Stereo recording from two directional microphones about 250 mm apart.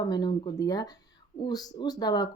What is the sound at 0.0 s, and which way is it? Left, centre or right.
Speech, centre.